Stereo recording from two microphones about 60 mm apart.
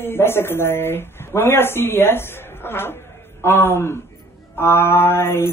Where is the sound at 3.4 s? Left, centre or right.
Left.